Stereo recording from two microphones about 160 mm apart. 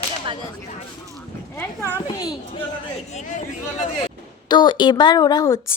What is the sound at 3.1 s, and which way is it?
Speech, 45° left (ahead or behind).